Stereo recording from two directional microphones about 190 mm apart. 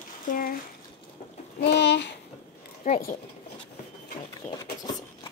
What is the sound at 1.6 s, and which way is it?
Speech, 65° left (ahead or behind).